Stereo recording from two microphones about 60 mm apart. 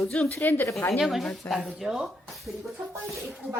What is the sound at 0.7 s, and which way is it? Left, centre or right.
Speech, left.